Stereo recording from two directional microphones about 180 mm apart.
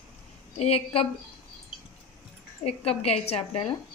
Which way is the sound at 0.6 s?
30° left (ahead or behind).